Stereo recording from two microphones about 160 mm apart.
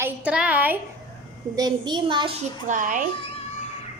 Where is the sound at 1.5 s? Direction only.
25° right (ahead or behind).